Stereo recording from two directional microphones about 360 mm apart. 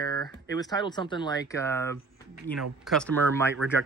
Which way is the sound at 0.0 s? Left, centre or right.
Centre.